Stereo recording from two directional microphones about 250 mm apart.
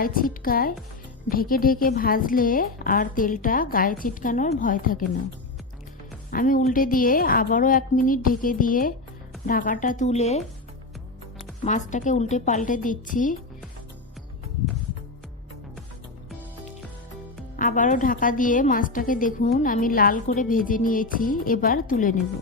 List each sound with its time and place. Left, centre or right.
0.0 s a woman's voice: left
6.3 s a woman's voice: left
11.6 s a woman's voice: left
17.6 s a woman's voice: left